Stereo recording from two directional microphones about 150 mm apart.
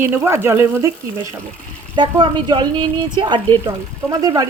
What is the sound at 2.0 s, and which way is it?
A woman's voice, 30° right (ahead or behind).